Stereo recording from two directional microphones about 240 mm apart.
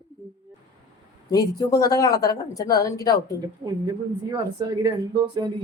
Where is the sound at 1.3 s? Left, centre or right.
Centre.